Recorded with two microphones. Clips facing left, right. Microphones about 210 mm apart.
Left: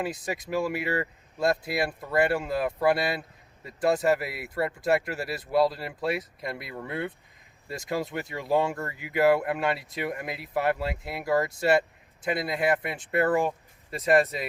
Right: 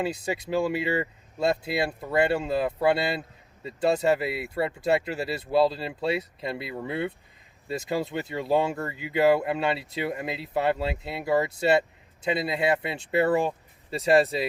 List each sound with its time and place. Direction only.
0.0 s speech: 25° right (ahead or behind)
6.7 s speech: 5° right (ahead or behind)
7.7 s speech: 25° right (ahead or behind)